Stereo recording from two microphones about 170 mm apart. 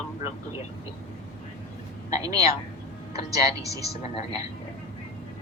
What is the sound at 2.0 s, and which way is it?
A woman's voice, 20° right (ahead or behind).